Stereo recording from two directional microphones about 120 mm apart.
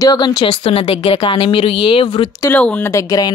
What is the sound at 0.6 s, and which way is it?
A woman's voice, 55° left (ahead or behind).